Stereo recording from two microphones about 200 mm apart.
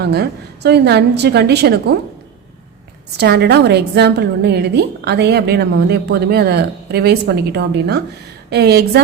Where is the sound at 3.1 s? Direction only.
55° right (ahead or behind).